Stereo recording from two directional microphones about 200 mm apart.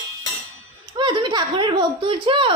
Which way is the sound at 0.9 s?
20° right (ahead or behind).